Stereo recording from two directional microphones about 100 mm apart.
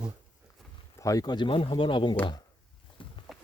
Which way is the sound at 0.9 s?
35° left (ahead or behind).